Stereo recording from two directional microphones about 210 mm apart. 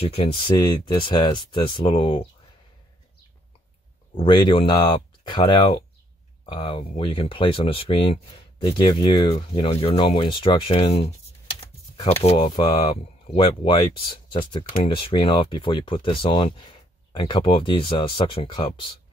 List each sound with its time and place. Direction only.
0.0 s speech: 25° left (ahead or behind)
4.2 s speech: 20° left (ahead or behind)